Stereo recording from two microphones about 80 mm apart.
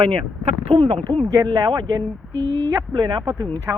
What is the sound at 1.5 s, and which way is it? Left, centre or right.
Speech, right.